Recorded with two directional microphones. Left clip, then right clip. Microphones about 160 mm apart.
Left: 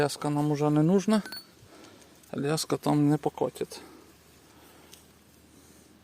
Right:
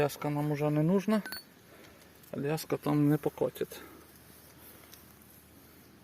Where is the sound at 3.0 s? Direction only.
15° left (ahead or behind).